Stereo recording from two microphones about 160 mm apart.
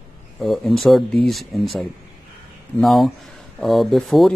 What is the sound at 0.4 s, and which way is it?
Speech, centre (ahead or behind).